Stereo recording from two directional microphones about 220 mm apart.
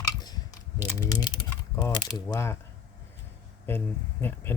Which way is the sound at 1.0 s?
15° left (ahead or behind).